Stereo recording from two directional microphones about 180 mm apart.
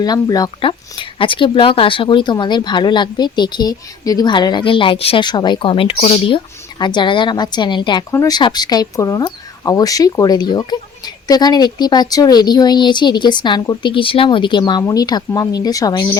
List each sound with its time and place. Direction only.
0.0 s speech: 20° left (ahead or behind)